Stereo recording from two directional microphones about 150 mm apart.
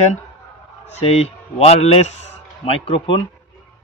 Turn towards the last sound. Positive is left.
turn(degrees=40)  # may be behind; listen again after turning